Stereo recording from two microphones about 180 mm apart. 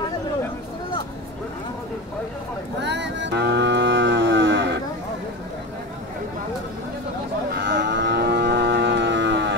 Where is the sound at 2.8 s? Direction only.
75° right (ahead or behind).